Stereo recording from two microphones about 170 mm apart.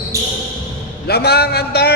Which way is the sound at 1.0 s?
70° left (ahead or behind).